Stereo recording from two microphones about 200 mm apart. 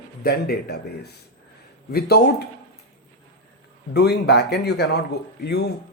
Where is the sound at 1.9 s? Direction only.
50° left (ahead or behind).